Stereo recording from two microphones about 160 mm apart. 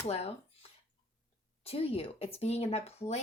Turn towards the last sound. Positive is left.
turn(degrees=40)  # may be behind; listen again after turning